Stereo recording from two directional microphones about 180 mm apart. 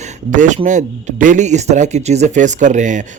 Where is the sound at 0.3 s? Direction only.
45° right (ahead or behind).